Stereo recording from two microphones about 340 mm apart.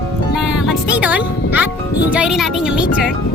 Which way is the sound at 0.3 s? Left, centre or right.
Centre.